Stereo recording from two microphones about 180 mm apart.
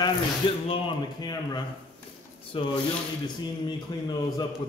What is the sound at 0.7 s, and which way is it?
Speech, 25° left (ahead or behind).